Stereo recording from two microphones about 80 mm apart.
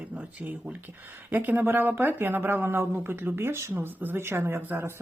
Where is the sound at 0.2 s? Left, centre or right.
Centre.